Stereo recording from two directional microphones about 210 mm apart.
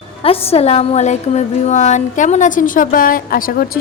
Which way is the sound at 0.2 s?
25° left (ahead or behind).